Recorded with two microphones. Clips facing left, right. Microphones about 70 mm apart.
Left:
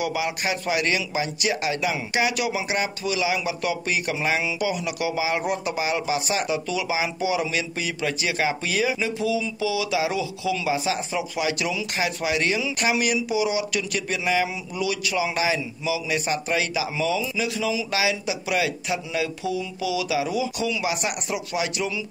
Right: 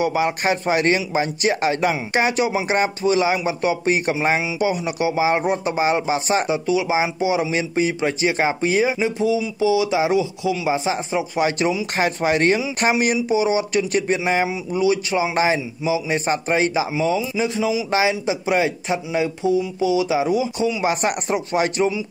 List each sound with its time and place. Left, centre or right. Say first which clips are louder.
0.0 s a man's voice: right 6 dB; right
20.8 s a man's voice: right 6 dB; right